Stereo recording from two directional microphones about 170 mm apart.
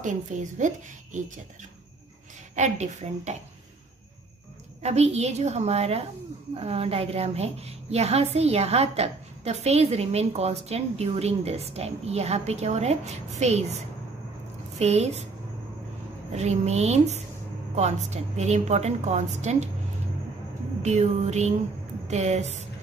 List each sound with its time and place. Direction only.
0.0 s a woman's voice: 45° right (ahead or behind)
2.5 s a woman's voice: 40° right (ahead or behind)
4.8 s a woman's voice: 40° right (ahead or behind)
14.8 s a woman's voice: 40° right (ahead or behind)
16.3 s a woman's voice: 40° right (ahead or behind)
20.8 s a woman's voice: 40° right (ahead or behind)